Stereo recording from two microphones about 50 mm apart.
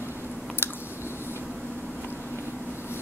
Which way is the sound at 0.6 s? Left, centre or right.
Left.